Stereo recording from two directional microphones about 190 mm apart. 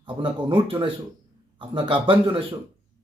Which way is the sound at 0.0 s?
25° right (ahead or behind).